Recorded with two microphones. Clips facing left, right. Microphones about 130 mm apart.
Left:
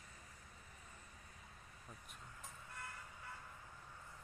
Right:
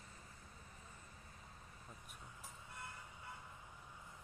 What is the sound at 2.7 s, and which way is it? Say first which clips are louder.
Vehicle: even; 20° right (ahead or behind).